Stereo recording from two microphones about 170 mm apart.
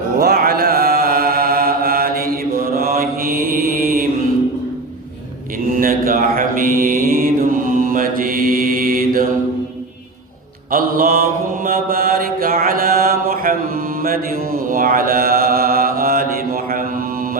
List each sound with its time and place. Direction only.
0.2 s mantra: 70° right (ahead or behind)
5.7 s mantra: 55° right (ahead or behind)
10.7 s mantra: 55° right (ahead or behind)